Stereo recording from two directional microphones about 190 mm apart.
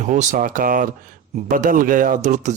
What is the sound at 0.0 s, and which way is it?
Speech, 40° right (ahead or behind).